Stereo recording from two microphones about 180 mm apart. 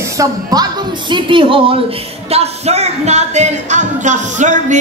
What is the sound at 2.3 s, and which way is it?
Music, 35° right (ahead or behind).